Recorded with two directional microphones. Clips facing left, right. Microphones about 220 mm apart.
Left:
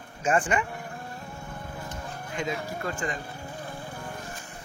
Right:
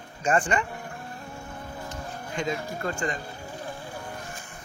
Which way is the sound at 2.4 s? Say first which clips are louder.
Right 2 dB; 5° left (ahead or behind).